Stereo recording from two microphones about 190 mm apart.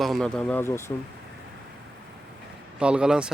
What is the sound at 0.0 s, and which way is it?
Speech, centre (ahead or behind).